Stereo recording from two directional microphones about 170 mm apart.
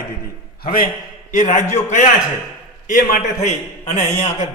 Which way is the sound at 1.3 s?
50° left (ahead or behind).